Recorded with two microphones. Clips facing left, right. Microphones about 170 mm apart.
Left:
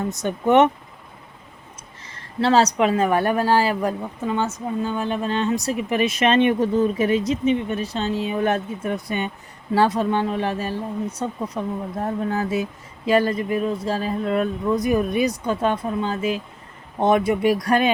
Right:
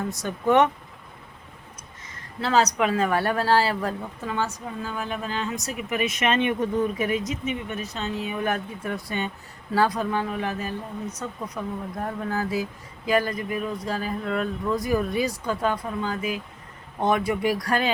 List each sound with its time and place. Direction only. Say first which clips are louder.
0.1 s a woman's voice: left 3 dB; 20° left (ahead or behind)
2.4 s a woman's voice: left 4 dB; 30° left (ahead or behind)